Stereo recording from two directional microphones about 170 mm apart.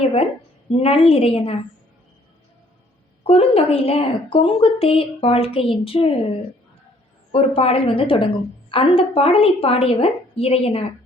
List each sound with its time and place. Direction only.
0.7 s a woman's voice: 35° left (ahead or behind)
3.2 s a woman's voice: 35° left (ahead or behind)
7.3 s a woman's voice: 35° left (ahead or behind)